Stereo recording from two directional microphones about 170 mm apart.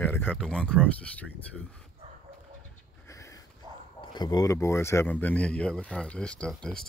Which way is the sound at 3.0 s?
20° left (ahead or behind).